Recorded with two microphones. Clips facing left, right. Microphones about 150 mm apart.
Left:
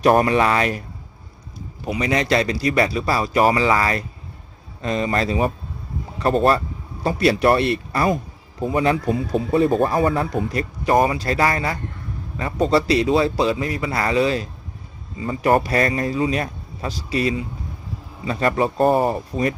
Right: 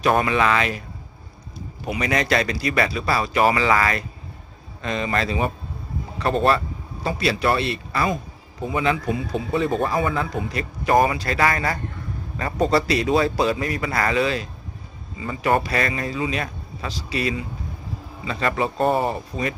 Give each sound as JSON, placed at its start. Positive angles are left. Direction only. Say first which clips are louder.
{"t": 0.0, "sound": "speech", "louder": "left 4 dB", "side_deg": 40}
{"t": 1.9, "sound": "speech", "louder": "left 2 dB", "side_deg": 30}
{"t": 7.0, "sound": "speech", "louder": "left 5 dB", "side_deg": 50}
{"t": 12.7, "sound": "a man's voice", "louder": "left 3 dB", "side_deg": 30}